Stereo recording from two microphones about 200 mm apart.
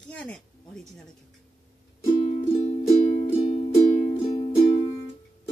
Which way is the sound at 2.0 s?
25° left (ahead or behind).